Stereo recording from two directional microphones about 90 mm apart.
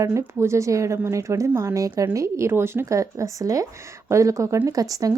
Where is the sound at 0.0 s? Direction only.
35° right (ahead or behind).